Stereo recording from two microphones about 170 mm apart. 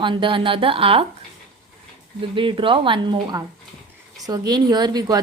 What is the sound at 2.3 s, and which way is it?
A woman's voice, 30° right (ahead or behind).